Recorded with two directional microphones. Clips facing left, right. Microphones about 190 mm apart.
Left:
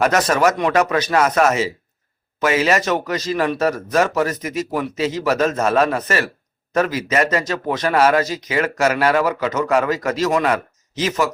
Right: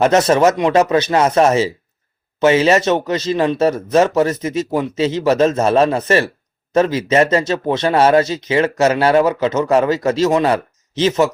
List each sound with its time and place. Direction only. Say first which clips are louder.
0.0 s a man's voice: right 4 dB; 25° right (ahead or behind)